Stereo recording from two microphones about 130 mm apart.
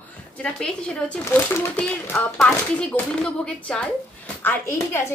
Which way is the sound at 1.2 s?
20° left (ahead or behind).